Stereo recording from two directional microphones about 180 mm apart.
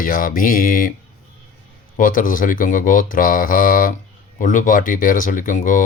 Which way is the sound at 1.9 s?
50° left (ahead or behind).